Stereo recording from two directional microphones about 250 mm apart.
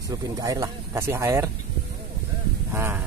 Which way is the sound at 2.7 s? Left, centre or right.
Centre.